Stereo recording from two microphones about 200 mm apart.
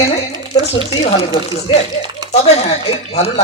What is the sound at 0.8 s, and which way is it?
Speech, 25° left (ahead or behind).